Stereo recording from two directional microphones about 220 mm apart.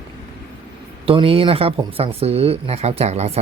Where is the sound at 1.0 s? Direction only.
25° right (ahead or behind).